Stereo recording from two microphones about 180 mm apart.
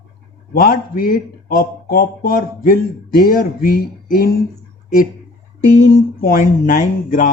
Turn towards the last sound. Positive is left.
turn(degrees=45)  # may be behind; listen again after turning